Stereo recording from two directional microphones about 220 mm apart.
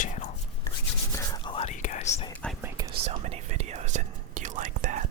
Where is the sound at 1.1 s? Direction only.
20° left (ahead or behind).